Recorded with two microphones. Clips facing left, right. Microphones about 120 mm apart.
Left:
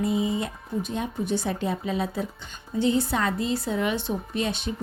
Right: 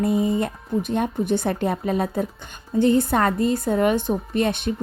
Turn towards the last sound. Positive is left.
turn(degrees=-55)  # may be behind; listen again after turning